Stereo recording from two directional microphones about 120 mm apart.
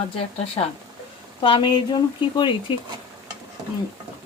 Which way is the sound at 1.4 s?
45° left (ahead or behind).